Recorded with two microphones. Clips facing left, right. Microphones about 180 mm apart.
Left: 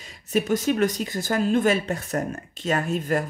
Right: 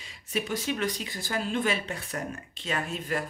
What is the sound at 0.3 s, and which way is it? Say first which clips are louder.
Speech: left 8 dB; 45° left (ahead or behind).